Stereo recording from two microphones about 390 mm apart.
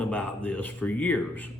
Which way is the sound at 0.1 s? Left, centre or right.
Centre.